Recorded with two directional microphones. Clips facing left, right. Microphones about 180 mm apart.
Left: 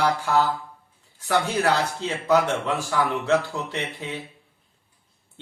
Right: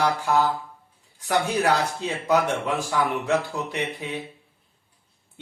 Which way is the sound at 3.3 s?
15° right (ahead or behind).